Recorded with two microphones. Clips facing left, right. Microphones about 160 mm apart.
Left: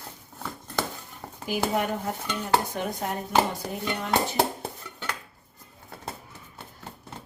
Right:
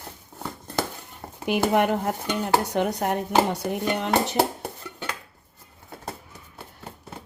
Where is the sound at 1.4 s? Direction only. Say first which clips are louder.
Right 5 dB; 65° right (ahead or behind).